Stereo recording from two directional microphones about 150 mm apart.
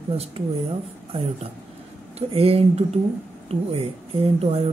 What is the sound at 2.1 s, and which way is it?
Speech, 40° right (ahead or behind).